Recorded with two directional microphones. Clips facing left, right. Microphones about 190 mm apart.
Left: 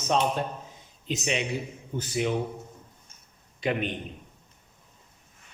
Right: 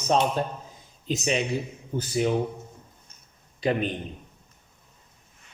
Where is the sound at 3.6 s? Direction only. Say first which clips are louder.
Right 3 dB; 35° right (ahead or behind).